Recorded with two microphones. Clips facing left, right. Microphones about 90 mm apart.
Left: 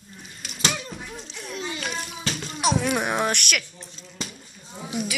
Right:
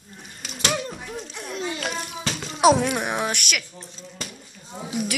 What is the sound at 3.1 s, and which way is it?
Speech, 10° right (ahead or behind).